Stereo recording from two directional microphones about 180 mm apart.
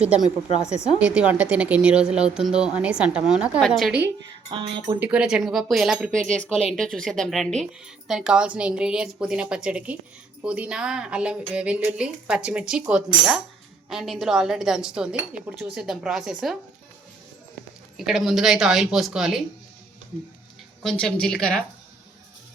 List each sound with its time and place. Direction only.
0.0 s a woman's voice: 5° right (ahead or behind)
4.4 s speech: 30° right (ahead or behind)
4.9 s speech: 10° right (ahead or behind)
17.9 s speech: centre (ahead or behind)
20.8 s speech: 5° left (ahead or behind)